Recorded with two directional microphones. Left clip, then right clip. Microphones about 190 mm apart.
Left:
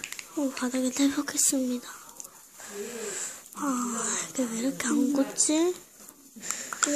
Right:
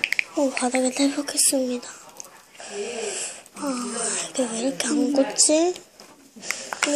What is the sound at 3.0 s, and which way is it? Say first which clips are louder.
Speech: right 6 dB; 35° left (ahead or behind).